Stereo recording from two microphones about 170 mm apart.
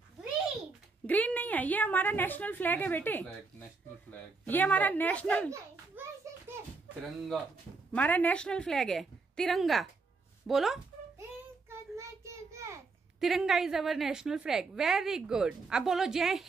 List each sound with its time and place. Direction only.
1.0 s a woman's voice: 10° left (ahead or behind)
6.0 s a sound: 10° right (ahead or behind)
7.9 s a woman's voice: 10° left (ahead or behind)
11.7 s child singing: 15° right (ahead or behind)
13.2 s a woman's voice: centre (ahead or behind)